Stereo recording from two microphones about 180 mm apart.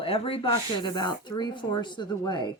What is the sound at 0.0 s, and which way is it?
Speech, 30° left (ahead or behind).